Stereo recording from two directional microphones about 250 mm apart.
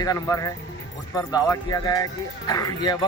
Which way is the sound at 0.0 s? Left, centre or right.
Centre.